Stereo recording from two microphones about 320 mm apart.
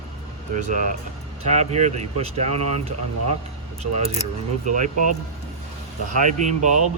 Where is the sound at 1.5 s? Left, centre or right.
Right.